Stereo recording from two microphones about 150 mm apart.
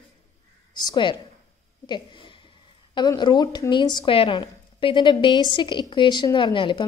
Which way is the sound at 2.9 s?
30° left (ahead or behind).